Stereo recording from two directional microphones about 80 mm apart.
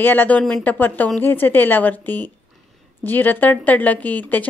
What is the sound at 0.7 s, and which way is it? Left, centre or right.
A woman's voice, left.